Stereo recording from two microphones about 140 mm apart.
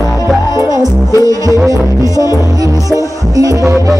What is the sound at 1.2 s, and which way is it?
Music, 25° right (ahead or behind).